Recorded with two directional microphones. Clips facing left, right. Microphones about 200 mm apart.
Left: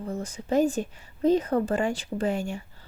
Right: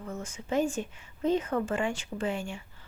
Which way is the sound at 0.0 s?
35° left (ahead or behind).